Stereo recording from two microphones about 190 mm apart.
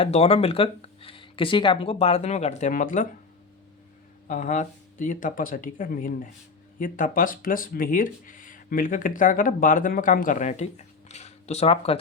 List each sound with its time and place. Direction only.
0.0 s speech: 30° left (ahead or behind)
4.3 s speech: 40° left (ahead or behind)